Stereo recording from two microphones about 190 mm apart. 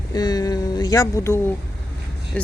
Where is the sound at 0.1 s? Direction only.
20° left (ahead or behind).